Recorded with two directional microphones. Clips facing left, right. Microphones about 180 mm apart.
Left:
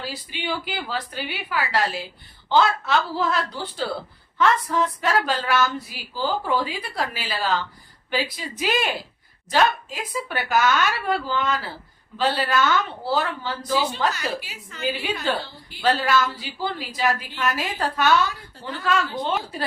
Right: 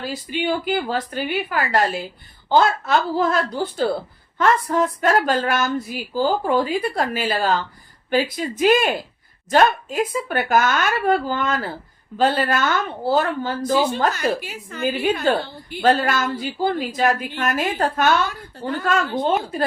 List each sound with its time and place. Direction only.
0.1 s a woman's voice: 50° right (ahead or behind)